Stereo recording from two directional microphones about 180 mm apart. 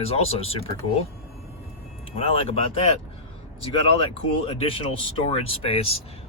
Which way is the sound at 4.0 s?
30° left (ahead or behind).